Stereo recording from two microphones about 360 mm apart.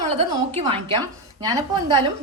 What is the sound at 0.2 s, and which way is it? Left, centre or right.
A woman's voice, centre.